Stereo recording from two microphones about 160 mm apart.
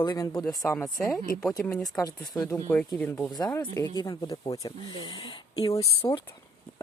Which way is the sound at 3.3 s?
25° left (ahead or behind).